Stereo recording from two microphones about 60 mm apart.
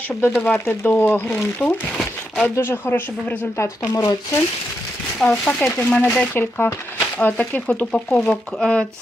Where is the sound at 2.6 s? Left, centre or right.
Left.